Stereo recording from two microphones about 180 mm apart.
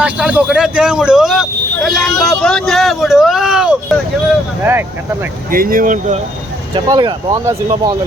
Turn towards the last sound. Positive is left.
turn(degrees=-25)  # may be behind; listen again after turning